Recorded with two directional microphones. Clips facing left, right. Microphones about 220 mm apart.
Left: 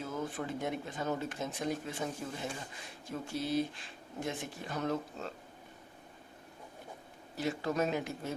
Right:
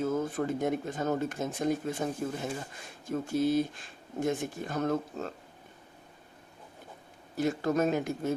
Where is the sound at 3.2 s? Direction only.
45° right (ahead or behind).